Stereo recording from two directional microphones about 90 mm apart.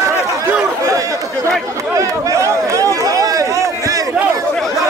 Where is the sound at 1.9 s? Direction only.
40° right (ahead or behind).